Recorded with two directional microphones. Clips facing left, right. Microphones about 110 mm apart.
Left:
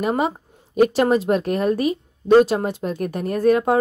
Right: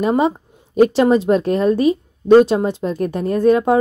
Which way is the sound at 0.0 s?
25° right (ahead or behind).